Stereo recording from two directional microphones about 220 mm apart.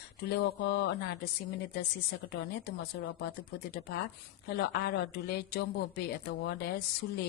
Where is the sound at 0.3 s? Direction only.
50° left (ahead or behind).